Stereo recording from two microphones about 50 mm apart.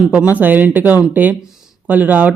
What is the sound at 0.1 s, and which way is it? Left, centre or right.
Speech, right.